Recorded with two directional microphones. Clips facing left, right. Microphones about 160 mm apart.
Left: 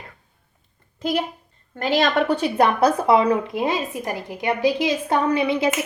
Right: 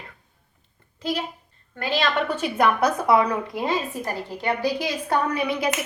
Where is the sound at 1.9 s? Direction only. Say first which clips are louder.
Left 5 dB; 45° left (ahead or behind).